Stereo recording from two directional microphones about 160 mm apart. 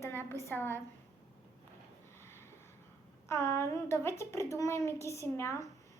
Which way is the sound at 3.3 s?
15° left (ahead or behind).